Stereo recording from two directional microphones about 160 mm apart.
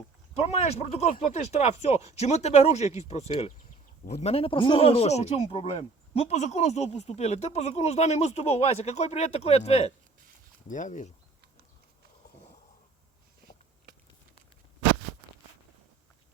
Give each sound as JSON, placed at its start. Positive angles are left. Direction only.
{"t": 0.3, "sound": "speech", "side_deg": 40}
{"t": 10.7, "sound": "speech", "side_deg": 50}